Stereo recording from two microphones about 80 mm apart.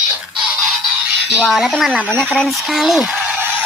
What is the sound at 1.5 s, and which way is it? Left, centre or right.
Speech, centre.